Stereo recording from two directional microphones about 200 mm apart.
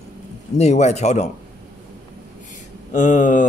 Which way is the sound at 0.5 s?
35° left (ahead or behind).